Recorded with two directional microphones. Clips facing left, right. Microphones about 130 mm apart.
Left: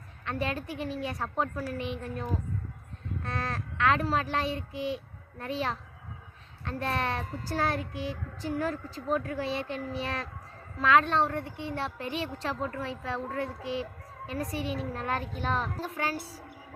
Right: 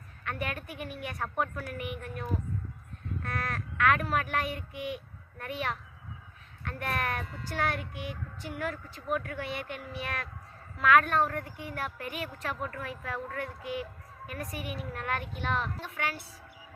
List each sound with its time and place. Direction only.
0.3 s a woman's voice: 30° left (ahead or behind)
3.2 s a woman's voice: 30° left (ahead or behind)